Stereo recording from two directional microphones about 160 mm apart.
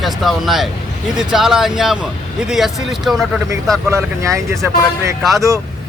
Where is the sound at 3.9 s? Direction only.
20° right (ahead or behind).